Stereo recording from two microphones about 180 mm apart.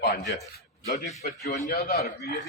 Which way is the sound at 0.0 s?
45° left (ahead or behind).